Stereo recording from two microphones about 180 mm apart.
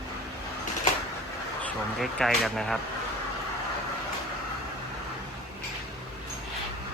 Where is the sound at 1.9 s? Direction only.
Centre (ahead or behind).